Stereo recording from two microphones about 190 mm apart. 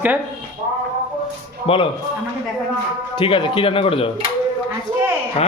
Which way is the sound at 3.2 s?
25° left (ahead or behind).